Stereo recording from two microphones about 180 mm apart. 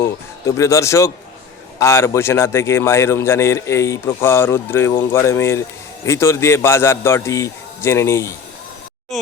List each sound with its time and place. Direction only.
0.0 s a man's voice: 15° left (ahead or behind)